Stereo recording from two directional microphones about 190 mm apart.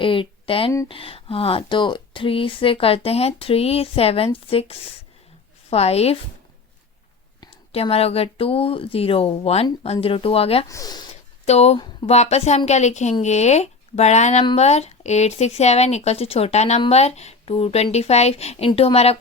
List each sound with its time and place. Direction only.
0.0 s speech: 25° left (ahead or behind)
7.4 s speech: 30° left (ahead or behind)
10.7 s speech: 20° left (ahead or behind)
11.4 s speech: 35° left (ahead or behind)